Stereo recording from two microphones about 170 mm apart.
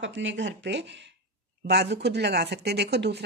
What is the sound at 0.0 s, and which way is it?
Speech, 90° right.